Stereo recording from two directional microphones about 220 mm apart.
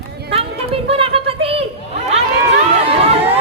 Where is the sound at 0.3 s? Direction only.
25° right (ahead or behind).